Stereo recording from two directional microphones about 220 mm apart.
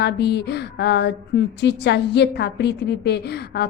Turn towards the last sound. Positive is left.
turn(degrees=45)  # may be behind; listen again after turning